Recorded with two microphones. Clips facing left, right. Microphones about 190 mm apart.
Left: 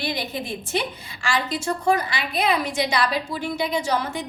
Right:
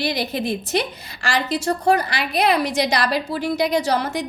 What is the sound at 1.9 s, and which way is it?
A woman's voice, 70° right (ahead or behind).